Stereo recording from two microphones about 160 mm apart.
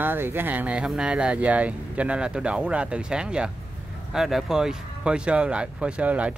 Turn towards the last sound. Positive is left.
turn(degrees=-10)  # may be behind; listen again after turning